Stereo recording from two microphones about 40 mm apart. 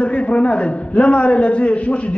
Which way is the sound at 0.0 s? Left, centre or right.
Left.